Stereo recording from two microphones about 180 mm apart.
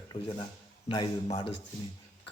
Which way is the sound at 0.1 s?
25° left (ahead or behind).